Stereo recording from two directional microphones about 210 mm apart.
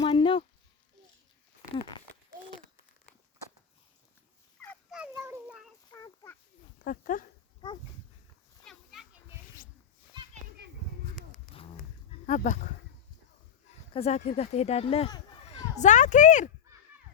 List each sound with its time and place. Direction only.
0.0 s a sound: 25° left (ahead or behind)
4.6 s fowl: 5° left (ahead or behind)
4.9 s child singing: 10° right (ahead or behind)
5.9 s a sound: 15° left (ahead or behind)
6.8 s dog: 40° left (ahead or behind)
7.6 s dog: 20° left (ahead or behind)
8.6 s children playing: centre (ahead or behind)
12.2 s a sound: 35° left (ahead or behind)
13.9 s speech: 30° left (ahead or behind)